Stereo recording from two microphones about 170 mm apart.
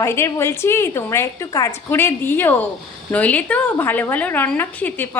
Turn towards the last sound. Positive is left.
turn(degrees=10)  # may be behind; listen again after turning